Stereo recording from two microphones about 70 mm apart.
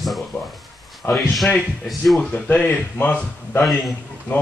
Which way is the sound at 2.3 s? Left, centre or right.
Centre.